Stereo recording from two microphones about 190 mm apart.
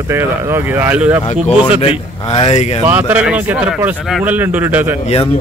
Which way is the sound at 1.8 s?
30° left (ahead or behind).